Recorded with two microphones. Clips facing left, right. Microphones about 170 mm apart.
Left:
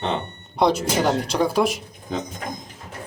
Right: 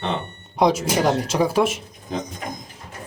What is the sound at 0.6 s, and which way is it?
Speech, 5° right (ahead or behind).